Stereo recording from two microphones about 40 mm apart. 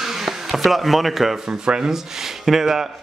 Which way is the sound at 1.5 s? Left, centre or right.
Right.